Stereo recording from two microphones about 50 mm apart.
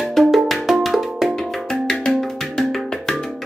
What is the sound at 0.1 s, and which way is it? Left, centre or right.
Music, centre.